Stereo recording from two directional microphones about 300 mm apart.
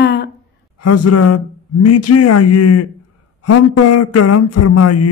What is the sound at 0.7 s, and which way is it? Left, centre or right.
Speech, left.